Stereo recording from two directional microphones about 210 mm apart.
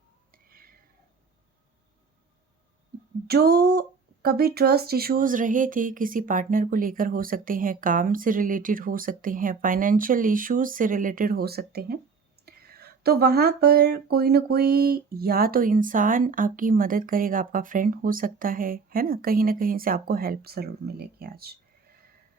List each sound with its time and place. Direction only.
0.3 s whispering: 45° right (ahead or behind)
3.2 s speech: 50° right (ahead or behind)